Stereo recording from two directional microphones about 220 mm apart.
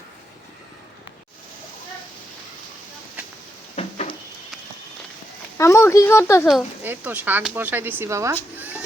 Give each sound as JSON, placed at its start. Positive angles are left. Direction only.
{"t": 3.8, "sound": "a sound", "side_deg": 30}
{"t": 5.5, "sound": "speech", "side_deg": 10}
{"t": 6.5, "sound": "speech", "side_deg": -5}